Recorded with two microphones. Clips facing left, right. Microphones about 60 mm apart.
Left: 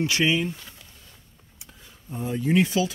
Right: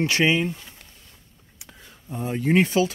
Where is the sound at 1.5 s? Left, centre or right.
Right.